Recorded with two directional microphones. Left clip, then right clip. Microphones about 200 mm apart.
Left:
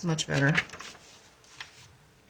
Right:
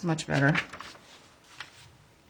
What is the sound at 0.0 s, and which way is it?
Speech, 15° right (ahead or behind).